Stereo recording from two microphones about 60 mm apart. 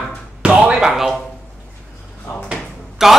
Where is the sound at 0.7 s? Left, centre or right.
Centre.